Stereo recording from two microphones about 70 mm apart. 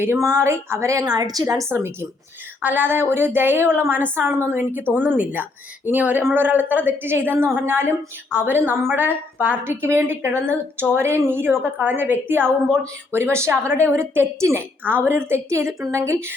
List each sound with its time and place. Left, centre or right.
0.0 s speech: right
1.0 s a woman's voice: right
1.7 s a woman's voice: right
2.6 s a woman's voice: right